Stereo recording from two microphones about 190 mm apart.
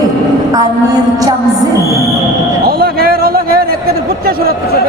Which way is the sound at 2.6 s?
55° right (ahead or behind).